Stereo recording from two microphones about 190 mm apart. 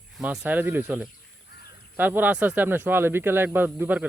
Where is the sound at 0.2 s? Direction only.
5° right (ahead or behind).